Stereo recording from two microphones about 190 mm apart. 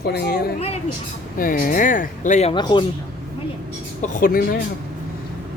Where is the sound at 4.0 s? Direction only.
45° left (ahead or behind).